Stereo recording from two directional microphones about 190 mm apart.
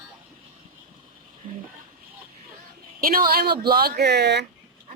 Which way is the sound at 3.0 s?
50° right (ahead or behind).